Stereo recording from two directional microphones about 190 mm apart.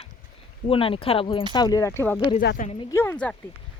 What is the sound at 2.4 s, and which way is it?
Speech, 45° left (ahead or behind).